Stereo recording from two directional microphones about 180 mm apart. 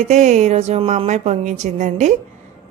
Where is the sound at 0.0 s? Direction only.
40° right (ahead or behind).